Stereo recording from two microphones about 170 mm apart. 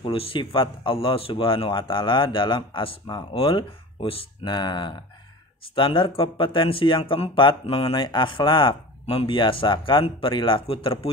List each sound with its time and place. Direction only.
0.0 s speech: 30° left (ahead or behind)